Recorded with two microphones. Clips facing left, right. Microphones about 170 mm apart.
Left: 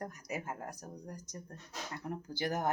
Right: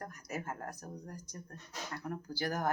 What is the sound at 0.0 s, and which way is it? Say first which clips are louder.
Speech: left 1 dB; 15° left (ahead or behind).